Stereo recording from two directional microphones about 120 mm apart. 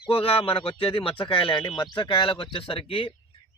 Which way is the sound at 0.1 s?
55° left (ahead or behind).